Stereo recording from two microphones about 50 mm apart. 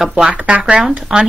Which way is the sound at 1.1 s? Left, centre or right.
Centre.